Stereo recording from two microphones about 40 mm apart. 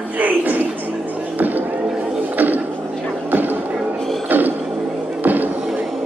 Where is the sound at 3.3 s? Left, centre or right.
Right.